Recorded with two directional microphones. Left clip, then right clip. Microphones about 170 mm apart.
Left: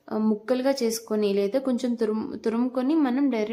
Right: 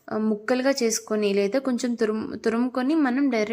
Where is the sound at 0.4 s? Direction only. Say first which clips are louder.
Right 2 dB; 20° right (ahead or behind).